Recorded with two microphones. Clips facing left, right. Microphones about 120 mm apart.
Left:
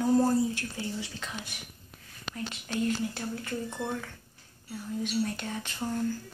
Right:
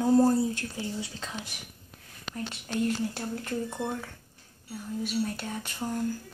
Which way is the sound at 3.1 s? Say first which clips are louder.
Right 2 dB; 15° right (ahead or behind).